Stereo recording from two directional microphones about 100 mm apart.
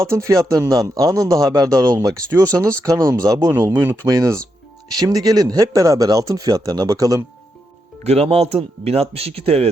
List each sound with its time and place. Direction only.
0.0 s speech: 30° right (ahead or behind)
3.7 s speech: 20° right (ahead or behind)
4.0 s speech: 30° right (ahead or behind)
8.0 s speech: 90° right